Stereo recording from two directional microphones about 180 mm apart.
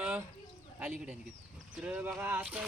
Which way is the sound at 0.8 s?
10° right (ahead or behind).